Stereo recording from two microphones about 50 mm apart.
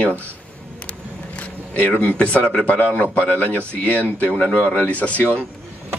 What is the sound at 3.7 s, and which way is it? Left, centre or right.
Speech, left.